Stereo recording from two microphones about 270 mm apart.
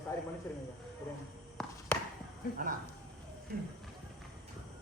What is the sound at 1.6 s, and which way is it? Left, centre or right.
Basketball bounce, centre.